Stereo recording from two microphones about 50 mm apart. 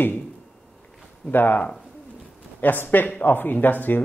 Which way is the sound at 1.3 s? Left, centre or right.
Left.